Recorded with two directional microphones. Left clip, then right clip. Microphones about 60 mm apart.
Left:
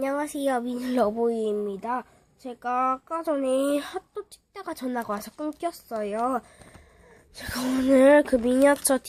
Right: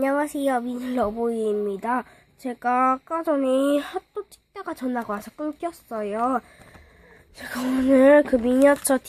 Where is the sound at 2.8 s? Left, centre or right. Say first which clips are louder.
Right 3 dB; right.